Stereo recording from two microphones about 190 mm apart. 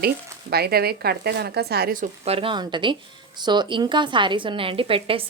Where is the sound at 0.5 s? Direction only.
55° right (ahead or behind).